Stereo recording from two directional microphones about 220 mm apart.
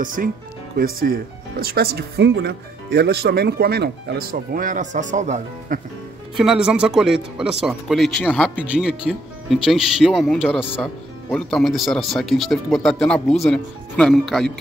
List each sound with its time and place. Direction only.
0.0 s speech: 40° right (ahead or behind)
6.3 s speech: centre (ahead or behind)